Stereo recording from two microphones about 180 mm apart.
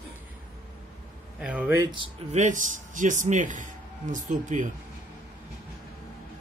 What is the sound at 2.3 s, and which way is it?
Speech, 45° right (ahead or behind).